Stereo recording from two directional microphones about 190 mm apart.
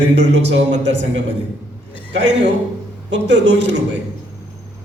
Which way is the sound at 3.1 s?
70° right (ahead or behind).